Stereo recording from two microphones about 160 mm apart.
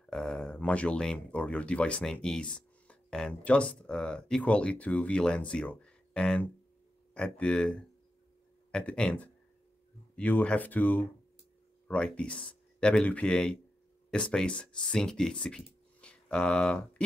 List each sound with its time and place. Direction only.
0.1 s speech: 5° left (ahead or behind)
8.7 s speech: 5° left (ahead or behind)